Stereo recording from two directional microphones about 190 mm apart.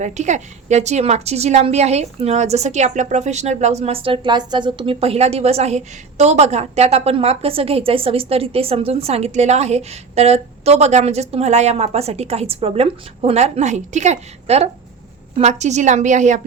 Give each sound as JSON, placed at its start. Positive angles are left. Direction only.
{"t": 0.0, "sound": "a woman's voice", "side_deg": -40}